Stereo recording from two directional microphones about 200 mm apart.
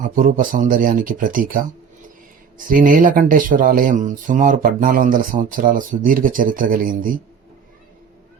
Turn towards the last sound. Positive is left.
turn(degrees=-45)  # may be behind; listen again after turning